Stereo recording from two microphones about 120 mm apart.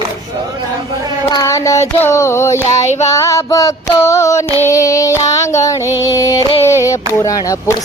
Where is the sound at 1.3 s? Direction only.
25° left (ahead or behind).